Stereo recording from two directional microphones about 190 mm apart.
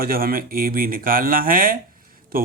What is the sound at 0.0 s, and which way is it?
Speech, 50° right (ahead or behind).